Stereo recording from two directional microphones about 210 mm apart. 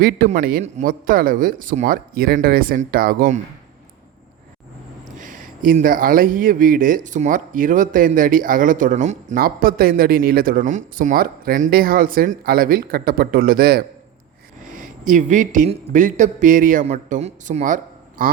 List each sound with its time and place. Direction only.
0.0 s speech: 40° right (ahead or behind)
5.2 s speech: 40° right (ahead or behind)